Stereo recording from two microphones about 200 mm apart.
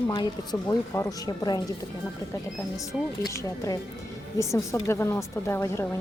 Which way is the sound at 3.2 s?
15° left (ahead or behind).